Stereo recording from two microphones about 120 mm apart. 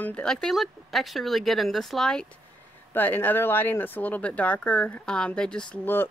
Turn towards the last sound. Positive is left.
turn(degrees=15)  # may be behind; listen again after turning